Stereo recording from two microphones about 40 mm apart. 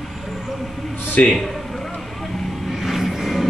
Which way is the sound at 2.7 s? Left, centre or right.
Centre.